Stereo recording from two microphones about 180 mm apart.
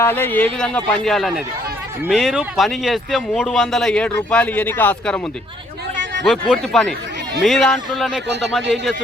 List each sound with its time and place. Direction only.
0.0 s speech: 10° left (ahead or behind)
6.5 s speech: centre (ahead or behind)